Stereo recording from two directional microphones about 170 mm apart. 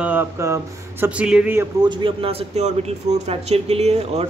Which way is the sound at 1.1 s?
5° right (ahead or behind).